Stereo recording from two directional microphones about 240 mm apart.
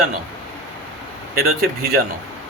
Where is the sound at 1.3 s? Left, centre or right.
Right.